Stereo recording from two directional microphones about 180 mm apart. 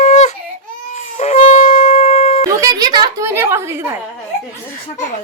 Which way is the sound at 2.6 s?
20° right (ahead or behind).